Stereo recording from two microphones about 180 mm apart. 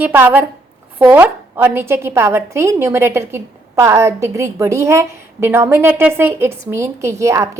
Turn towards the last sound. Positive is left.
turn(degrees=-15)  # may be behind; listen again after turning